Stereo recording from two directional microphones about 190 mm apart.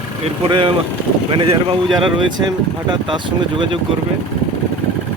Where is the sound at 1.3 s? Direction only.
30° right (ahead or behind).